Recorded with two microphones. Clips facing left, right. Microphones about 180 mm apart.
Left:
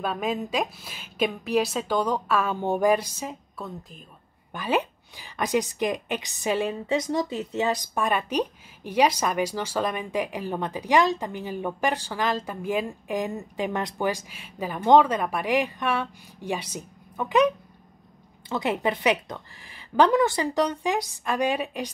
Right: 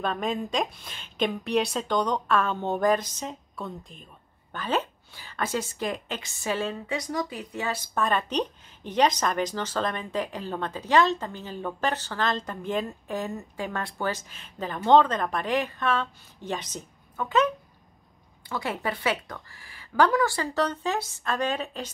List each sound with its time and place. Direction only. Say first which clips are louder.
0.0 s a woman's voice: left 1 dB; 5° left (ahead or behind)
18.5 s a woman's voice: left 5 dB; 20° left (ahead or behind)